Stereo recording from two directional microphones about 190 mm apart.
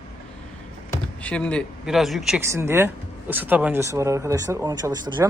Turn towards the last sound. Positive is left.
turn(degrees=-20)  # may be behind; listen again after turning